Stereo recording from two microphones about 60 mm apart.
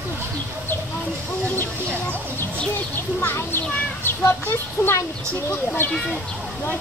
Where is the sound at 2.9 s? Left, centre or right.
Left.